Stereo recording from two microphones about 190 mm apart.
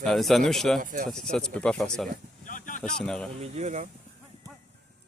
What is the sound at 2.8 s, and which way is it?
Speech, 5° left (ahead or behind).